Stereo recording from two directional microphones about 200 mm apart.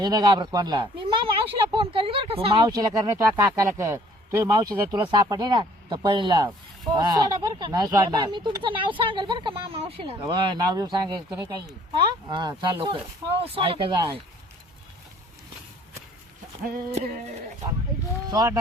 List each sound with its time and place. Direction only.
0.0 s speech: 20° right (ahead or behind)
18.3 s speech: 20° right (ahead or behind)